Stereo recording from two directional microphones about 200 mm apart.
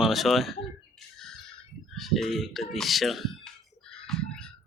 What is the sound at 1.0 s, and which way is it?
Squawk, centre (ahead or behind).